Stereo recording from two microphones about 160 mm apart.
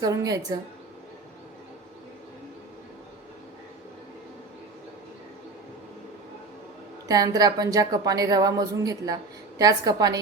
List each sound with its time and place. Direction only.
0.0 s a woman's voice: 20° right (ahead or behind)
7.1 s a woman's voice: 25° right (ahead or behind)